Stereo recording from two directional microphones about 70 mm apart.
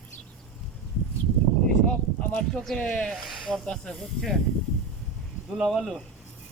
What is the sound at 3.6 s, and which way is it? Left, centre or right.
Speech, centre.